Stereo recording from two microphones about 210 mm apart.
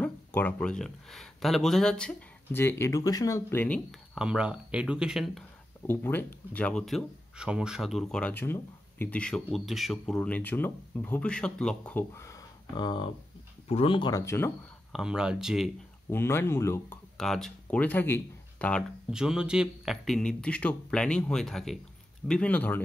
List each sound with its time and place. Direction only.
0.0 s speech: 10° left (ahead or behind)
14.9 s speech: 5° right (ahead or behind)
16.1 s speech: 10° left (ahead or behind)